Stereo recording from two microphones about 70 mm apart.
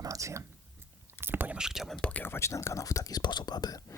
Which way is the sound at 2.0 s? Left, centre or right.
Left.